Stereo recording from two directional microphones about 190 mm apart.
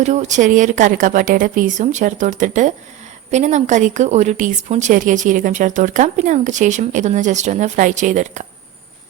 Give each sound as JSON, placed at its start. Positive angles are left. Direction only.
{"t": 0.0, "sound": "a woman's voice", "side_deg": -40}